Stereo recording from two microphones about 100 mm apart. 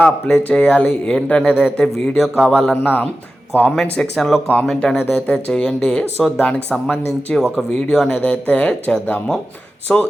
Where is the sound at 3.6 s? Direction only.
5° left (ahead or behind).